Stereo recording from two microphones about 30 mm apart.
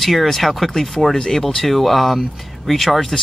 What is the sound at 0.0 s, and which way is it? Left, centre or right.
Speech, centre.